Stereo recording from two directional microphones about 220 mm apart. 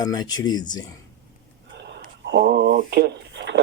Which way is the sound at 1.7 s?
50° right (ahead or behind).